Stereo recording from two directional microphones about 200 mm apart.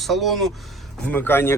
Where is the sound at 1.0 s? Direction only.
10° left (ahead or behind).